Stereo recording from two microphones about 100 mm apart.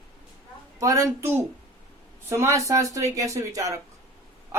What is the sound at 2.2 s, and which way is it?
A woman's voice, 30° right (ahead or behind).